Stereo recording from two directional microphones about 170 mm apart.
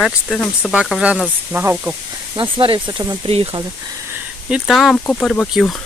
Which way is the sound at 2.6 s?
30° right (ahead or behind).